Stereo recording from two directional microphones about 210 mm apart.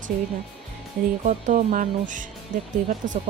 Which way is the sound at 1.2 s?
35° right (ahead or behind).